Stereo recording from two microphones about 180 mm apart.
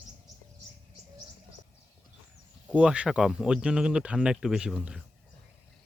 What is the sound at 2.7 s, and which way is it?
Speech, 5° right (ahead or behind).